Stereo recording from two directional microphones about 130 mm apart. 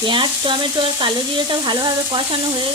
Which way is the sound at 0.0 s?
40° right (ahead or behind).